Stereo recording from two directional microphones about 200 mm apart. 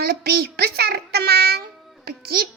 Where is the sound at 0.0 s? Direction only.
50° right (ahead or behind).